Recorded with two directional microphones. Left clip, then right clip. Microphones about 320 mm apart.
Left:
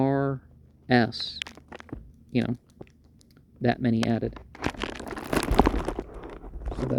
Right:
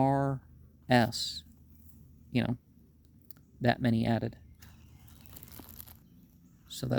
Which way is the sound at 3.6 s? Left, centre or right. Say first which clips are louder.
Left 4 dB; centre.